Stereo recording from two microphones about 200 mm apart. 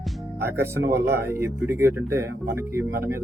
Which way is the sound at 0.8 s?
60° right (ahead or behind).